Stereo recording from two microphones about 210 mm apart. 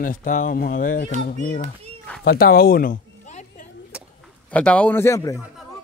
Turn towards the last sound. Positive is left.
turn(degrees=15)  # may be behind; listen again after turning